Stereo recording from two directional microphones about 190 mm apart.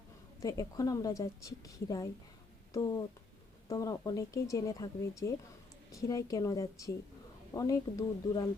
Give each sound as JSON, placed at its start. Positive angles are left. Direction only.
{"t": 0.3, "sound": "a woman's voice", "side_deg": 15}
{"t": 5.9, "sound": "a woman's voice", "side_deg": 20}